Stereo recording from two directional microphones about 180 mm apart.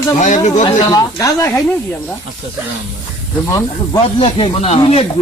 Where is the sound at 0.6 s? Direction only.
20° left (ahead or behind).